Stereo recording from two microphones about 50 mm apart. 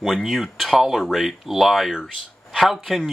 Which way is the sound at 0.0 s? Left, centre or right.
Centre.